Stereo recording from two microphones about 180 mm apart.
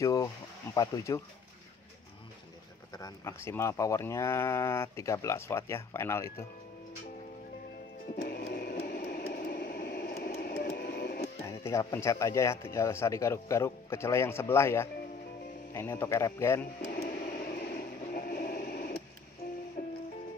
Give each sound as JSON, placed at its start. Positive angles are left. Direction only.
{"t": 0.0, "sound": "speech", "side_deg": 20}
{"t": 2.9, "sound": "speech", "side_deg": 20}
{"t": 8.2, "sound": "a sound", "side_deg": 60}
{"t": 11.4, "sound": "speech", "side_deg": 15}
{"t": 16.9, "sound": "a sound", "side_deg": 60}
{"t": 19.8, "sound": "music", "side_deg": 55}